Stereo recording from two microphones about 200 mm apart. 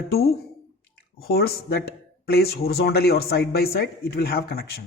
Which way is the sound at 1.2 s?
50° left (ahead or behind).